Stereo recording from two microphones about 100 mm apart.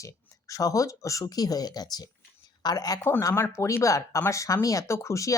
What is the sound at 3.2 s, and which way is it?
Speech, 30° left (ahead or behind).